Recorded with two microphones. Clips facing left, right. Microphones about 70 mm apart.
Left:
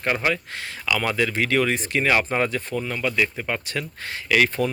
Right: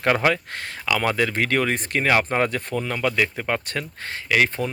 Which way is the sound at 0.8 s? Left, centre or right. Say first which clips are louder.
Right 1 dB; right.